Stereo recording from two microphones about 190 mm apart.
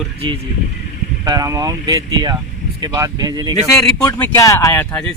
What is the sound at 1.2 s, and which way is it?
Speech, 20° right (ahead or behind).